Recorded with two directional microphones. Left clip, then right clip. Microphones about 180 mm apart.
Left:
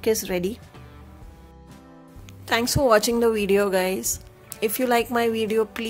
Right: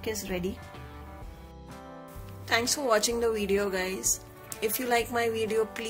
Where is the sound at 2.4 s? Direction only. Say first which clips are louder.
Left 6 dB; 50° left (ahead or behind).